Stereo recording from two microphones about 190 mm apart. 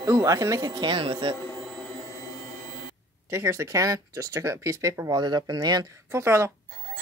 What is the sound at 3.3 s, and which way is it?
Speech, 15° right (ahead or behind).